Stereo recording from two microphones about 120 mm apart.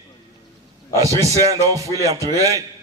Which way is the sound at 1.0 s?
30° right (ahead or behind).